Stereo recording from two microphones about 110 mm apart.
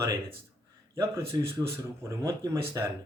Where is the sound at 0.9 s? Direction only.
30° right (ahead or behind).